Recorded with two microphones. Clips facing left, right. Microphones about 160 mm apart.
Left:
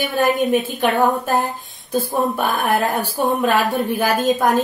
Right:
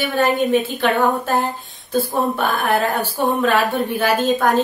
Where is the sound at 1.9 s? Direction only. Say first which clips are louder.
Even; 15° left (ahead or behind).